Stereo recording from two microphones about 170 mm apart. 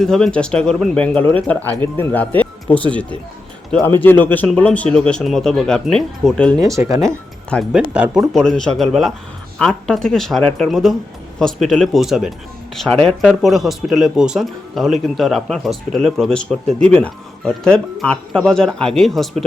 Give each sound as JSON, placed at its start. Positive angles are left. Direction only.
{"t": 0.0, "sound": "speech", "side_deg": 5}
{"t": 6.6, "sound": "speech", "side_deg": -20}
{"t": 7.5, "sound": "speech", "side_deg": 0}